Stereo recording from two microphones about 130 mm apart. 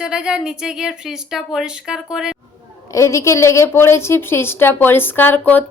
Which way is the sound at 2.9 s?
25° left (ahead or behind).